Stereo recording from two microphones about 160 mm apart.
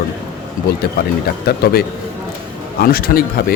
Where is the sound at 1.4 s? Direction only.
80° left.